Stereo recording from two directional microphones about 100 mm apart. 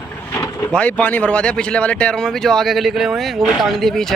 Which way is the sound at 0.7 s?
10° left (ahead or behind).